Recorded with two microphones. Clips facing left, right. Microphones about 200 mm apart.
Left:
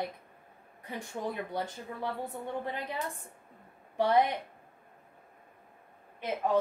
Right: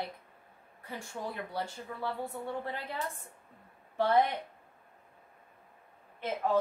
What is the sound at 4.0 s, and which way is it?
Speech, 15° left (ahead or behind).